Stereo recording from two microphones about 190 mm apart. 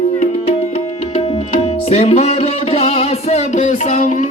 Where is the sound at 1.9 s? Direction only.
35° left (ahead or behind).